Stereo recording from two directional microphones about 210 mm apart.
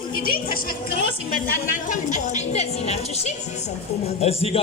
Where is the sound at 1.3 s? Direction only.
40° left (ahead or behind).